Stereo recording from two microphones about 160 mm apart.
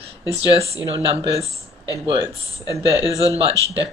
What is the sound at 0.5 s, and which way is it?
Speech, 40° right (ahead or behind).